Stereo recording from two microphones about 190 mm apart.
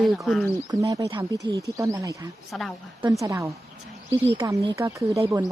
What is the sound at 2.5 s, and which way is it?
Speech, centre (ahead or behind).